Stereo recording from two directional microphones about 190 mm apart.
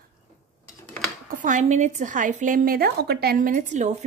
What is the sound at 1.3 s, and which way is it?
A woman's voice, 40° right (ahead or behind).